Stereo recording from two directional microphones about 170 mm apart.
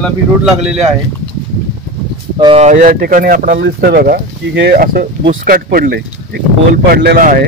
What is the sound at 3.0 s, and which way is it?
Speech, 60° right (ahead or behind).